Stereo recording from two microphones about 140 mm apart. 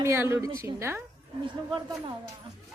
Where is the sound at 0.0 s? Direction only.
20° right (ahead or behind).